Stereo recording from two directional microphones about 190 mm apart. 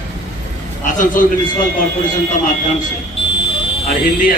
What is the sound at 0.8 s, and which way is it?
Speech, 45° left (ahead or behind).